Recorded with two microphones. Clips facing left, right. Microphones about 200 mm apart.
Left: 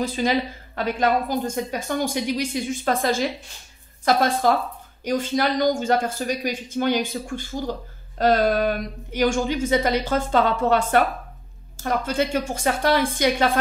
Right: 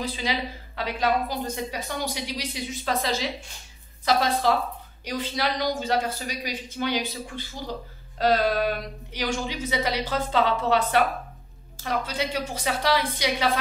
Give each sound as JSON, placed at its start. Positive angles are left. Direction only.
{"t": 0.0, "sound": "a woman's voice", "side_deg": 50}